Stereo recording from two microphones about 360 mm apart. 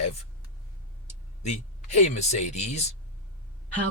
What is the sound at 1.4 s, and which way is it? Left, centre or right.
Speech, centre.